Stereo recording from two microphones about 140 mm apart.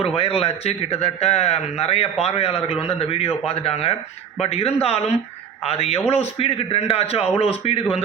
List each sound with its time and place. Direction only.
0.0 s a man's voice: 45° left (ahead or behind)